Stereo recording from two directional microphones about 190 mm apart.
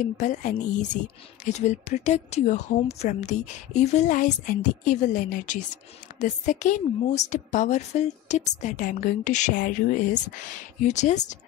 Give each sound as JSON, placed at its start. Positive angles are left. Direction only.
{"t": 0.0, "sound": "a woman's voice", "side_deg": 40}